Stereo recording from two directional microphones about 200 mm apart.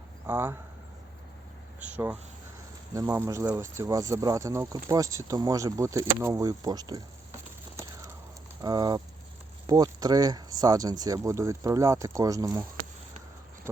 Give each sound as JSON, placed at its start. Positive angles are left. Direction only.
{"t": 0.3, "sound": "speech", "side_deg": -10}
{"t": 1.8, "sound": "speech", "side_deg": -5}
{"t": 8.6, "sound": "speech", "side_deg": -20}